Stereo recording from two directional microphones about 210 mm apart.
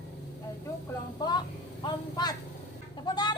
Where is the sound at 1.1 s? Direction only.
20° left (ahead or behind).